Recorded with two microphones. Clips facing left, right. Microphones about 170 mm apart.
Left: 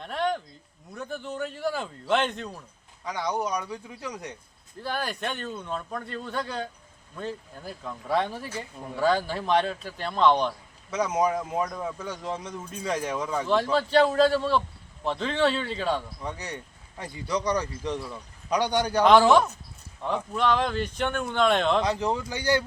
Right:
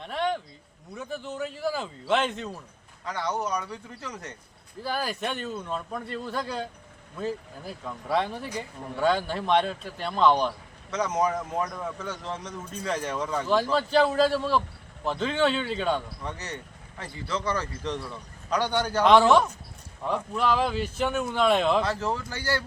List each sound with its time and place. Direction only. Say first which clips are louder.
0.0 s a sound: even; centre (ahead or behind)
0.9 s speech: even; centre (ahead or behind)
3.0 s speech: left 1 dB; 10° left (ahead or behind)
4.8 s speech: right 1 dB; centre (ahead or behind)
10.9 s speech: left 1 dB; 10° left (ahead or behind)
16.2 s speech: left 1 dB; 10° left (ahead or behind)
19.0 s speech: even; centre (ahead or behind)
21.8 s speech: left 2 dB; 15° left (ahead or behind)